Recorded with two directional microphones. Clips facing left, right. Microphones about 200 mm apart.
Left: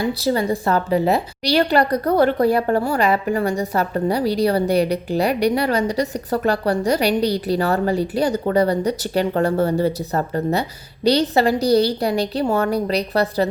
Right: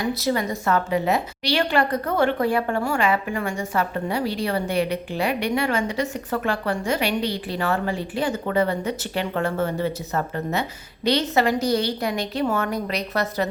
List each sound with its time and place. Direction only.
0.0 s a woman's voice: 35° left (ahead or behind)